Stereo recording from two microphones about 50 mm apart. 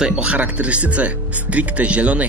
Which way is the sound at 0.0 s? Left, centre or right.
Centre.